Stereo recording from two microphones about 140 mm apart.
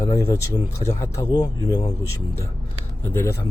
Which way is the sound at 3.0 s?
15° left (ahead or behind).